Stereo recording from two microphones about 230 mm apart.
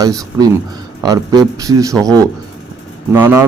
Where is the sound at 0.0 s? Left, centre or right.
Centre.